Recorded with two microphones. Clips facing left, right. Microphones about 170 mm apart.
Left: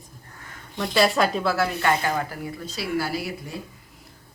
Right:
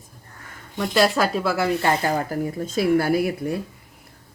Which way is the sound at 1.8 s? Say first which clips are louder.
Right 2 dB; 35° right (ahead or behind).